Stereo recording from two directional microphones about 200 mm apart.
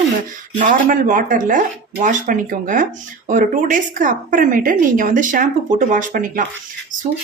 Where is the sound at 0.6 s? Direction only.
40° right (ahead or behind).